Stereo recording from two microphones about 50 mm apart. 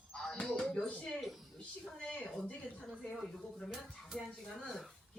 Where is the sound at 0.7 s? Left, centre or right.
Left.